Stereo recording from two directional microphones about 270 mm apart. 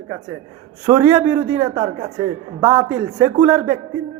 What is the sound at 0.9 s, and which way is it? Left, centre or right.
A man's voice, centre.